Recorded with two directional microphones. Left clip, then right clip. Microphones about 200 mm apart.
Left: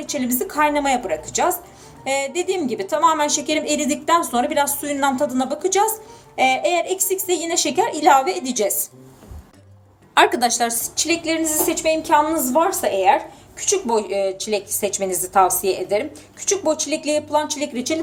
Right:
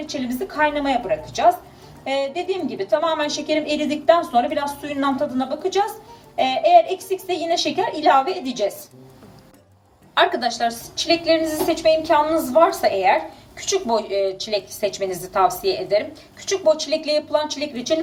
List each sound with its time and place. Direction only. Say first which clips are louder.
0.1 s a woman's voice: left 5 dB; 55° left (ahead or behind)
10.2 s a woman's voice: left 3 dB; 55° left (ahead or behind); by 17.9 s 40° left (ahead or behind)